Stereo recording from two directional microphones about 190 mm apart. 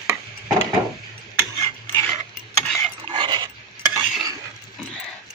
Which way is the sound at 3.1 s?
25° right (ahead or behind).